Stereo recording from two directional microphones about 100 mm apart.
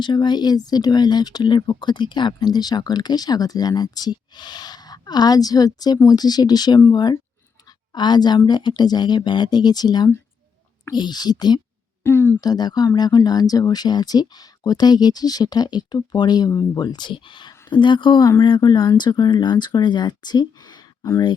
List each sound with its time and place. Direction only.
0.0 s speech: 50° left (ahead or behind)
12.0 s speech: 20° left (ahead or behind)
12.4 s speech: 40° left (ahead or behind)